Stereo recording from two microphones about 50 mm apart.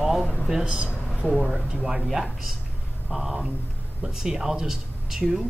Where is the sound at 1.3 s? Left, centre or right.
Centre.